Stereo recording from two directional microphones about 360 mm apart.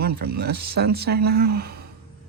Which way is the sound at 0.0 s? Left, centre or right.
Right.